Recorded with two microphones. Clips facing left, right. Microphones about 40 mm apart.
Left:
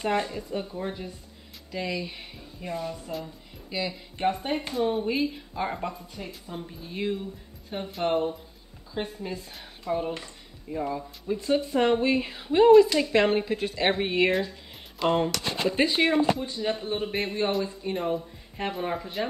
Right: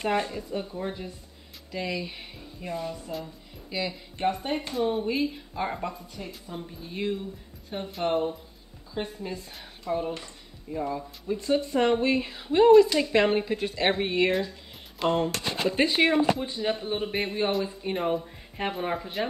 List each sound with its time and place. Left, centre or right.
0.0 s a woman's voice: centre
9.9 s a woman's voice: centre
15.0 s speech: left
15.7 s speech: centre
16.2 s speech: right
16.7 s a woman's voice: centre
17.8 s speech: right